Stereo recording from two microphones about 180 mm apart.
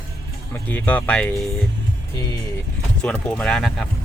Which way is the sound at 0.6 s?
10° left (ahead or behind).